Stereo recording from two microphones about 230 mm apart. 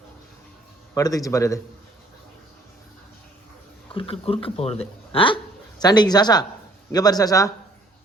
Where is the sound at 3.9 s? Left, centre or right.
Left.